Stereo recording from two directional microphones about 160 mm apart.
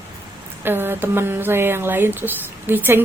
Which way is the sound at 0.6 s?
15° right (ahead or behind).